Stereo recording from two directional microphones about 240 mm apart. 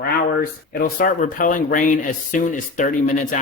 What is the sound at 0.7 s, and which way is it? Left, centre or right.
Speech, left.